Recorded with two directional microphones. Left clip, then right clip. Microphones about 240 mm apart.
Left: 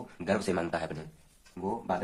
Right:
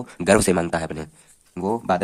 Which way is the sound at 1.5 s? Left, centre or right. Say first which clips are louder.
Right 10 dB; right.